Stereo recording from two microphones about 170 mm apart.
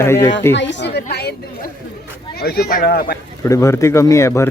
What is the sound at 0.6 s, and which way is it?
Speech, 90° left.